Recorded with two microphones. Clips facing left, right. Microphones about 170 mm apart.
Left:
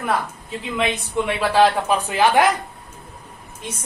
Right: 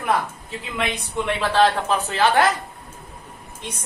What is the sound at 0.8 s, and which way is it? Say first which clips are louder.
A woman's voice: left 3 dB; 5° left (ahead or behind).